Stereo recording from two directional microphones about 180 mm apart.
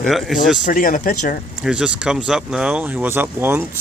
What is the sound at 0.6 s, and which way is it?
Speech, 50° left (ahead or behind).